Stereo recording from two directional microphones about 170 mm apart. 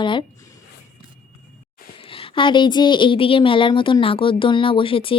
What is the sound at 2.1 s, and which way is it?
A woman's voice, 30° left (ahead or behind).